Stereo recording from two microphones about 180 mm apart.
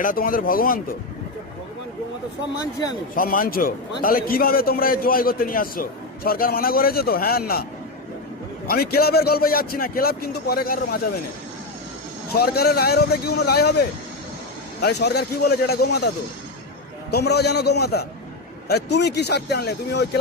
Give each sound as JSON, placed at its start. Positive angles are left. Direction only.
{"t": 0.0, "sound": "speech", "side_deg": 50}
{"t": 3.2, "sound": "a man's voice", "side_deg": 50}
{"t": 8.6, "sound": "a man's voice", "side_deg": 60}
{"t": 12.3, "sound": "a man's voice", "side_deg": 60}
{"t": 17.1, "sound": "a man's voice", "side_deg": 65}